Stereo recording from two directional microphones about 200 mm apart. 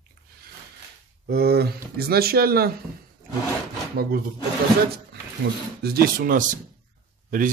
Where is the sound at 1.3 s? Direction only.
50° right (ahead or behind).